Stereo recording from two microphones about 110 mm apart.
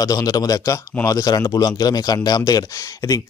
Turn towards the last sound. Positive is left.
turn(degrees=30)  # may be behind; listen again after turning